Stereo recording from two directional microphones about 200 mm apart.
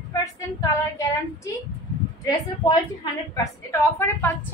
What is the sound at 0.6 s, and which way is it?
A woman's voice, 15° left (ahead or behind).